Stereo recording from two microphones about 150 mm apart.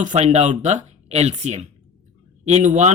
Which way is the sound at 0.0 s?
50° right (ahead or behind).